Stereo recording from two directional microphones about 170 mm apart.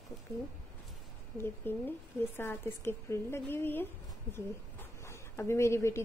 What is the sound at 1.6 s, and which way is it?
A woman's voice, 10° left (ahead or behind).